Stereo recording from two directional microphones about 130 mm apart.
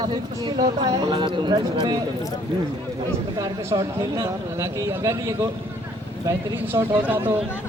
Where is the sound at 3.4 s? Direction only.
25° right (ahead or behind).